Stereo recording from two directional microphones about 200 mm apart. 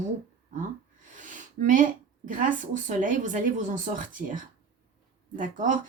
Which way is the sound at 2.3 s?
40° right (ahead or behind).